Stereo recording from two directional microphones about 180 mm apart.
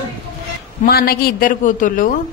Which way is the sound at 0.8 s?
55° left (ahead or behind).